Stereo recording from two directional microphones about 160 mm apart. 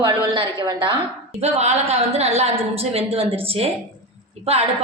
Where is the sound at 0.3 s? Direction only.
30° right (ahead or behind).